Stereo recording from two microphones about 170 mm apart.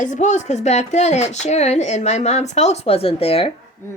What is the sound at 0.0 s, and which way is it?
A woman's voice, 45° left (ahead or behind).